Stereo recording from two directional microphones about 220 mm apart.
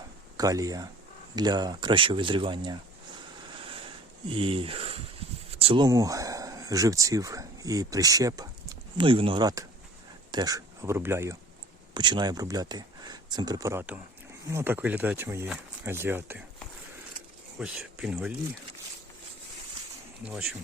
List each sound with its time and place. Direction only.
0.3 s speech: 15° right (ahead or behind)
4.3 s speech: 25° right (ahead or behind)
17.6 s speech: 5° right (ahead or behind)